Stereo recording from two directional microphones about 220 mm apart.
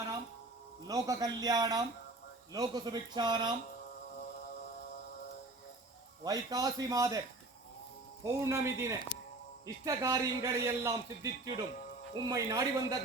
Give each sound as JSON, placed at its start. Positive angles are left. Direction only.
{"t": 0.9, "sound": "a man's voice", "side_deg": -15}
{"t": 6.2, "sound": "a man's voice", "side_deg": -15}
{"t": 8.2, "sound": "a man's voice", "side_deg": -15}